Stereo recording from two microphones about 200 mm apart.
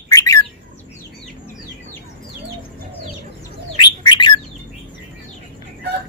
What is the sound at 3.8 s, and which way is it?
Bird, 20° left (ahead or behind).